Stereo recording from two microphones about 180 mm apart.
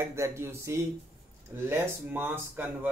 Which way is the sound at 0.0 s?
15° right (ahead or behind).